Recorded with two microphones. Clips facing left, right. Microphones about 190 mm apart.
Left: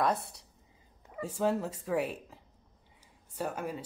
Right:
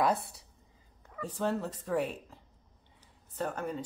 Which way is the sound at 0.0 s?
Centre (ahead or behind).